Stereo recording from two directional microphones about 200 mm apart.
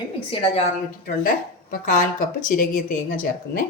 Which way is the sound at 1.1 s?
45° left (ahead or behind).